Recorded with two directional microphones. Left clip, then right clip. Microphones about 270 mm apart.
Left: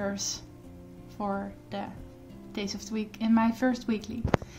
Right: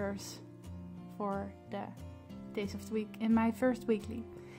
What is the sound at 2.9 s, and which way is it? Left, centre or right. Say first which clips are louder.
A woman's voice: left 5 dB; right.